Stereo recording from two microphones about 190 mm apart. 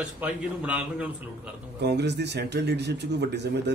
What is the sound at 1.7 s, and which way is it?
Speech, 65° right (ahead or behind).